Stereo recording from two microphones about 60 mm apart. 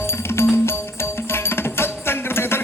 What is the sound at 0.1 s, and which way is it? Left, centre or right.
Music, left.